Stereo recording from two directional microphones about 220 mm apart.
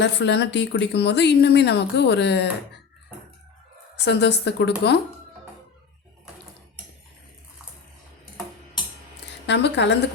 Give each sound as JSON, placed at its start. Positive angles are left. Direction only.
{"t": 0.0, "sound": "a woman's voice", "side_deg": 50}
{"t": 4.0, "sound": "a woman's voice", "side_deg": 50}
{"t": 9.5, "sound": "a woman's voice", "side_deg": 50}